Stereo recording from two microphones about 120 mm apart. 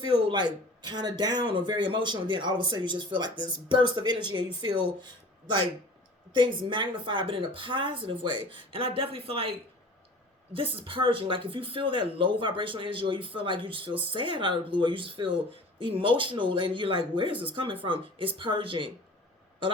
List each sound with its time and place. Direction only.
0.0 s speech: 40° right (ahead or behind)
6.3 s speech: 45° right (ahead or behind)